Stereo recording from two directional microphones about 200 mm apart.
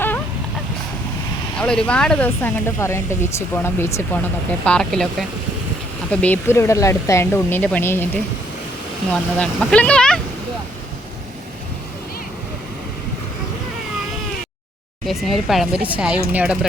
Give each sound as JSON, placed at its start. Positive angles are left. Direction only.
{"t": 1.5, "sound": "speech", "side_deg": 5}
{"t": 6.1, "sound": "speech", "side_deg": 10}
{"t": 15.0, "sound": "speech", "side_deg": 0}